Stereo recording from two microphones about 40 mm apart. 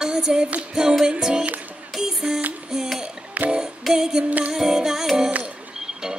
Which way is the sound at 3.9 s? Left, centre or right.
Centre.